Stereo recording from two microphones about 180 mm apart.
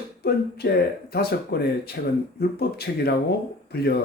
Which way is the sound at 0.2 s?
60° left (ahead or behind).